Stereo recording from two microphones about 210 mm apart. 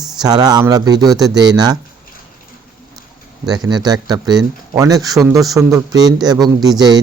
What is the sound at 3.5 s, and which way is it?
A man's voice, 20° right (ahead or behind).